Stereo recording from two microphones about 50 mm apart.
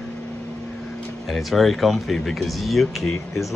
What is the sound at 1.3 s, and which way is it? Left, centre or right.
Speech, centre.